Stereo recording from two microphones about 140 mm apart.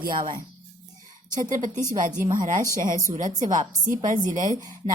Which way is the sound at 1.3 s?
65° right (ahead or behind).